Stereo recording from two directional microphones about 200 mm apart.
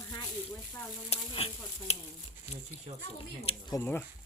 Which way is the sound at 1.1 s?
30° left (ahead or behind).